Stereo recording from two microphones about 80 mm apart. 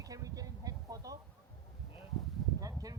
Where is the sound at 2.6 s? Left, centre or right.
Right.